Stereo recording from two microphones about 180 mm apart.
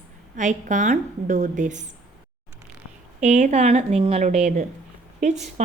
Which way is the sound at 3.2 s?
40° right (ahead or behind).